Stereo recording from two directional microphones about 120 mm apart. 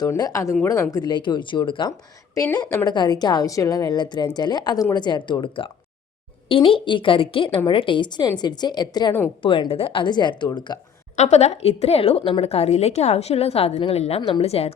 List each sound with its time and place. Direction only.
0.0 s a woman's voice: 35° left (ahead or behind)
9.4 s a woman's voice: 45° left (ahead or behind)
11.2 s a woman's voice: 65° left (ahead or behind)